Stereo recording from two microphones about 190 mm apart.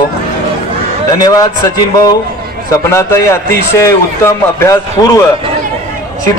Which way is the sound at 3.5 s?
15° left (ahead or behind).